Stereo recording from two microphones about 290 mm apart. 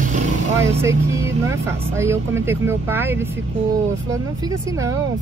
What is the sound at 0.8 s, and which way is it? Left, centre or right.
Speech, centre.